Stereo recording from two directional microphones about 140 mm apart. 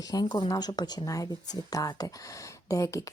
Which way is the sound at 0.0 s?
30° left (ahead or behind).